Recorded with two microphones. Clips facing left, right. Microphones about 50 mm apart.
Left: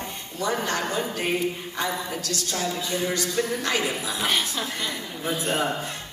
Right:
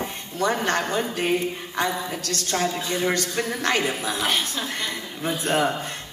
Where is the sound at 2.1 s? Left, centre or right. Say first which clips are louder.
Right 3 dB; right.